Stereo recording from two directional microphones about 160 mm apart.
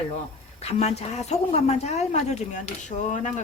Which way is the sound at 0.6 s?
40° left (ahead or behind).